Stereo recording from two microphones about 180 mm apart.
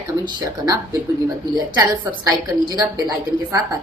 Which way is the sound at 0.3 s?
20° right (ahead or behind).